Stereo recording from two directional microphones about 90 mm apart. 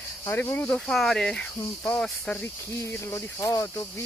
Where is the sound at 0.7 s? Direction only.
5° left (ahead or behind).